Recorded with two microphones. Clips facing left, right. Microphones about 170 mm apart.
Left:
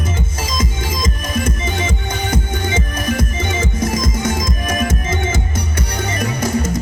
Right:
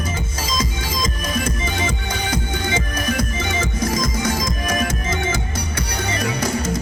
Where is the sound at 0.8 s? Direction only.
25° left (ahead or behind).